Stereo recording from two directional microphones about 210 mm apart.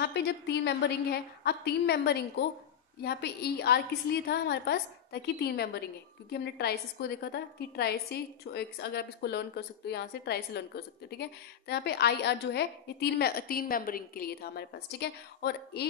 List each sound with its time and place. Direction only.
0.0 s a woman's voice: 50° left (ahead or behind)